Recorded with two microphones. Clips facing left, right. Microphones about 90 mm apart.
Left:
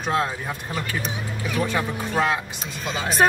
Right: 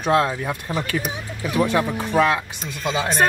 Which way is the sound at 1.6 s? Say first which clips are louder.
Right 4 dB; 65° right (ahead or behind).